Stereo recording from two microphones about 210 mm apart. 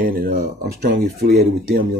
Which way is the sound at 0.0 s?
45° right (ahead or behind).